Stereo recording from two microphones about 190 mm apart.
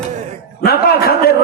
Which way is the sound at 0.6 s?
55° left (ahead or behind).